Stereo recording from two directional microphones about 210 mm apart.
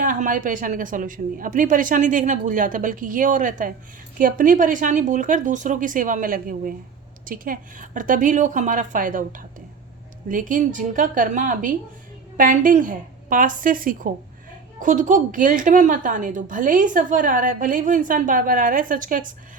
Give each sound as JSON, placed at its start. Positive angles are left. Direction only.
{"t": 0.0, "sound": "a woman's voice", "side_deg": -40}